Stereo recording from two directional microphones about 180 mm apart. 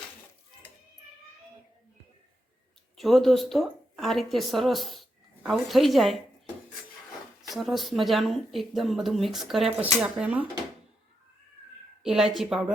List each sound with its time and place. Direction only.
3.0 s speech: centre (ahead or behind)
7.4 s speech: centre (ahead or behind)
12.0 s speech: centre (ahead or behind)